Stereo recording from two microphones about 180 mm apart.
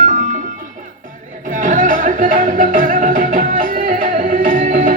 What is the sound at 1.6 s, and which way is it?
Music, 50° right (ahead or behind).